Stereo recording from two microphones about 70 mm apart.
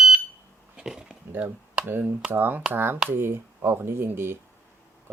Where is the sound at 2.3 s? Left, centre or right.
Right.